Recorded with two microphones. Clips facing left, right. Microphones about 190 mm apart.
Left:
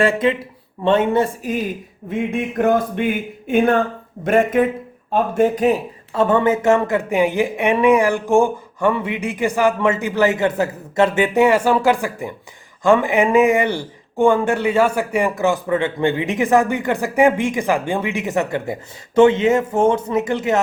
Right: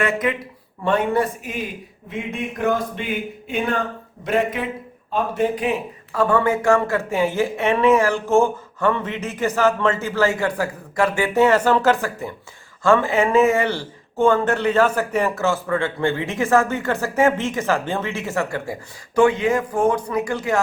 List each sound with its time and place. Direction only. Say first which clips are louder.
0.0 s a woman's voice: left 5 dB; 30° left (ahead or behind)
2.6 s speech: left 5 dB; 55° left (ahead or behind)
6.1 s speech: left 3 dB; 20° left (ahead or behind)